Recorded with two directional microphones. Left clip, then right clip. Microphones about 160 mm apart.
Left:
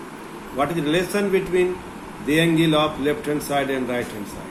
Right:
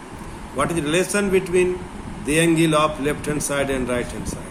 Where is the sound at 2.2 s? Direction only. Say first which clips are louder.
Right 1 dB; 75° right (ahead or behind).